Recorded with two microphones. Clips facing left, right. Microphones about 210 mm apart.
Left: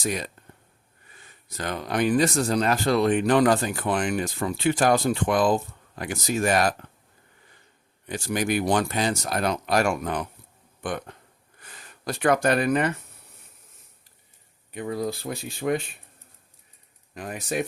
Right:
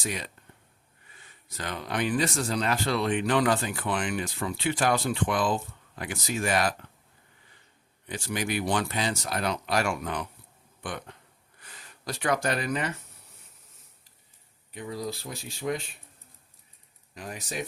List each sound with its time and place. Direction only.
0.0 s speech: 45° left (ahead or behind)
1.5 s speech: 45° left (ahead or behind)
8.0 s speech: 45° left (ahead or behind)
14.7 s speech: 60° left (ahead or behind)
17.2 s speech: 55° left (ahead or behind)